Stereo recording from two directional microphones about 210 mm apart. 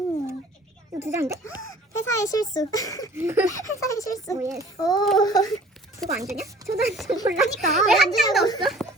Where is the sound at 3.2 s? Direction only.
10° right (ahead or behind).